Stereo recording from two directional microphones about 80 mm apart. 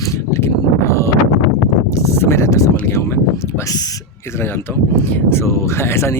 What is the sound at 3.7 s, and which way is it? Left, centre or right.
Speech, left.